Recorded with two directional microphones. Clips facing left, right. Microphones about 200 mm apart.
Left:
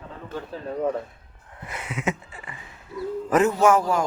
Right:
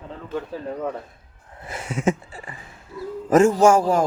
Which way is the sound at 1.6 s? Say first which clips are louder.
Right 5 dB; 30° right (ahead or behind).